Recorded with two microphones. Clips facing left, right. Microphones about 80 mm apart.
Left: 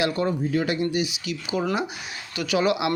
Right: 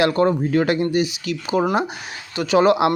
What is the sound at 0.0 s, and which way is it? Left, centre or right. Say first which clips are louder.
Speech: right 6 dB; right.